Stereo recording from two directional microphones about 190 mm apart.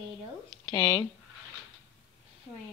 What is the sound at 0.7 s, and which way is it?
Speech, 20° left (ahead or behind).